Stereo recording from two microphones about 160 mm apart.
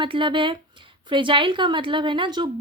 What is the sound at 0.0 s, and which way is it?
A woman's voice, 30° right (ahead or behind).